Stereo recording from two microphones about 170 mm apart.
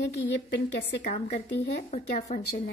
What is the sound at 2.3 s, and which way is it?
Speech, 45° left (ahead or behind).